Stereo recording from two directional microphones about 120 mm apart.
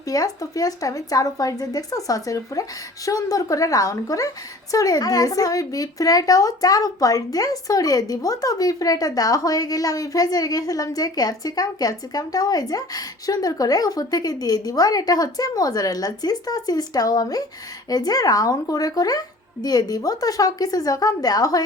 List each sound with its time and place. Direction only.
0.1 s speech: 30° left (ahead or behind)